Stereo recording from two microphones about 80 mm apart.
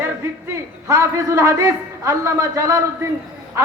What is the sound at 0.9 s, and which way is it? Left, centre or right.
A man's voice, right.